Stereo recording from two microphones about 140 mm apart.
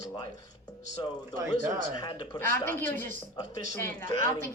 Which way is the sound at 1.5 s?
90° right.